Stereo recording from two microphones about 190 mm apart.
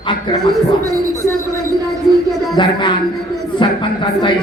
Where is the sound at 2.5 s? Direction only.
25° left (ahead or behind).